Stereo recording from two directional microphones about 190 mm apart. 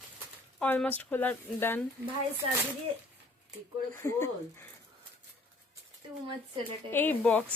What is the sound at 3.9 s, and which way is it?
Speech, 15° left (ahead or behind).